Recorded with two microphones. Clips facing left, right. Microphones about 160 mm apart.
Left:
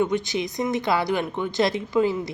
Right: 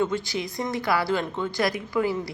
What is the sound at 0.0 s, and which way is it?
Speech, 20° left (ahead or behind).